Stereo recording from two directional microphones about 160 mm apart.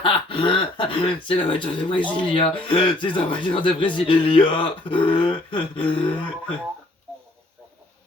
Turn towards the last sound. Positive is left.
turn(degrees=35)  # may be behind; listen again after turning